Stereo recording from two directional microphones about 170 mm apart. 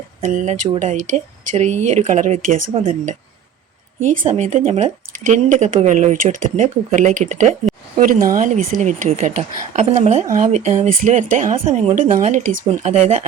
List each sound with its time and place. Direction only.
0.2 s speech: 50° right (ahead or behind)
4.3 s speech: 45° right (ahead or behind)
11.5 s a woman's voice: 35° right (ahead or behind)
11.9 s speech: 50° right (ahead or behind)